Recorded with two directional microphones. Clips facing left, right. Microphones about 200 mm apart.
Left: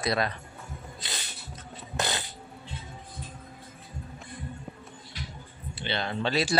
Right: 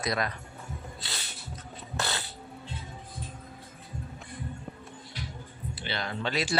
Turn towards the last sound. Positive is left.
turn(degrees=35)  # may be behind; listen again after turning